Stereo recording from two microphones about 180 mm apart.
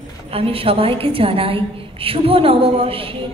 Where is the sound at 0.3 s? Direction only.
30° right (ahead or behind).